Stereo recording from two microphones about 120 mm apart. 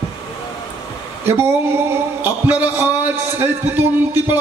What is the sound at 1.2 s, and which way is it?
Speech, 20° right (ahead or behind).